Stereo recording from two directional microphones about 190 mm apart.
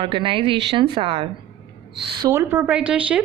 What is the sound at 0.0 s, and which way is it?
Speech, 25° right (ahead or behind).